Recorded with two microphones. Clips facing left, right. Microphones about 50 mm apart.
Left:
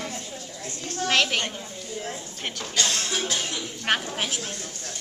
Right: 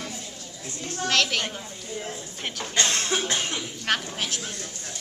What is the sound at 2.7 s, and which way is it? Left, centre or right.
Cough, right.